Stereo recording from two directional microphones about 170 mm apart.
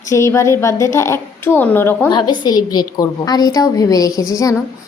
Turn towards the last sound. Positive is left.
turn(degrees=20)  # may be behind; listen again after turning